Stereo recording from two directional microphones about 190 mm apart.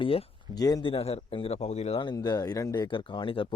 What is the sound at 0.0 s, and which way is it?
Speech, 30° left (ahead or behind).